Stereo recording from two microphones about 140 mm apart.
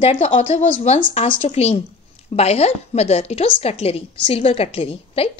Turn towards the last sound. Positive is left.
turn(degrees=45)  # may be behind; listen again after turning